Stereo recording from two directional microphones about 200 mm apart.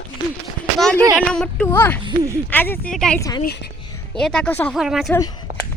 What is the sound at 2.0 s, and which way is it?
Speech, 15° right (ahead or behind).